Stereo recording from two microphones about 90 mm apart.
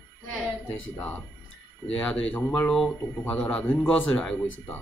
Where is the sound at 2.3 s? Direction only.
20° left (ahead or behind).